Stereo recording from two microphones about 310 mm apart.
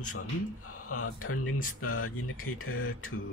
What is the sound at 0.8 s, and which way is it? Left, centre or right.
Speech, left.